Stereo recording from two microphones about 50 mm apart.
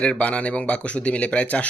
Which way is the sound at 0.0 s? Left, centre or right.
Left.